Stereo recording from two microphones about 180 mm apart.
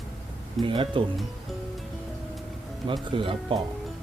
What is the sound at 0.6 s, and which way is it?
Speech, 30° right (ahead or behind).